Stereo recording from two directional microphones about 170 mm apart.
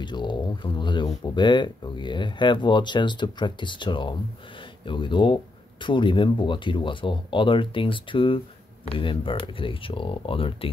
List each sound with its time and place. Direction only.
0.0 s speech: 25° left (ahead or behind)